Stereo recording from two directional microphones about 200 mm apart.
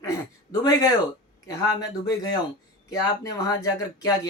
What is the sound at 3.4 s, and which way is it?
Speech, 20° left (ahead or behind).